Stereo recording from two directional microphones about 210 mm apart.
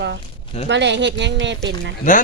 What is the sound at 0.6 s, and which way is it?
Speech, 55° right (ahead or behind).